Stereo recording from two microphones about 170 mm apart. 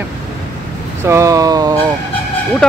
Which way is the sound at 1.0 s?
15° right (ahead or behind).